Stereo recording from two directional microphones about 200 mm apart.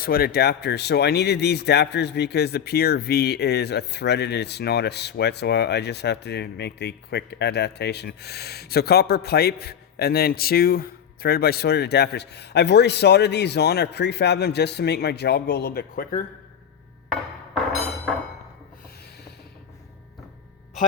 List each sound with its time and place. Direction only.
0.0 s speech: 50° left (ahead or behind)